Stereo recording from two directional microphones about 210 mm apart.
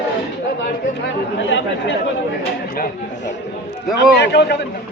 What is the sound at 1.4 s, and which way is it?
Chatter, 60° left (ahead or behind).